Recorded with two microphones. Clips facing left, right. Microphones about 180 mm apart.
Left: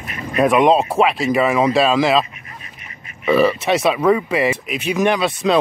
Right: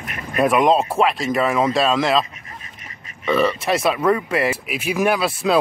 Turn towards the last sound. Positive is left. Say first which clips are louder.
# left 2 dB
turn(degrees=-5)  # may be behind; listen again after turning